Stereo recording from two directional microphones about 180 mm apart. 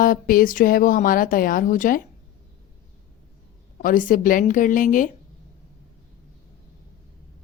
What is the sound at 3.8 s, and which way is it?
Speech, 50° left (ahead or behind).